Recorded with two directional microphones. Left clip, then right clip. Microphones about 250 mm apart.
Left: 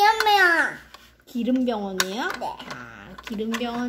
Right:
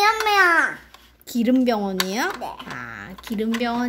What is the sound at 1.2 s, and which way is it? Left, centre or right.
Speech, right.